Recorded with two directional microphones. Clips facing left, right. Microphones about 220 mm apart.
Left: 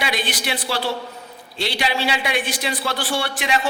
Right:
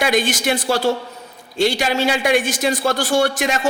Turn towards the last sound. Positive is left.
turn(degrees=-45)  # may be behind; listen again after turning